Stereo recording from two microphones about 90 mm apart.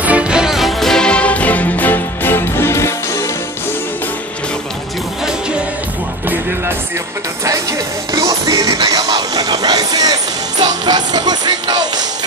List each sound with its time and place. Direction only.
0.0 s music: 15° right (ahead or behind); by 3.3 s 35° left (ahead or behind)
7.4 s music: 35° right (ahead or behind)